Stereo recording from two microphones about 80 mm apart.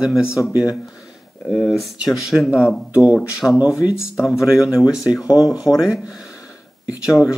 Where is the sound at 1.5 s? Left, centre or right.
Centre.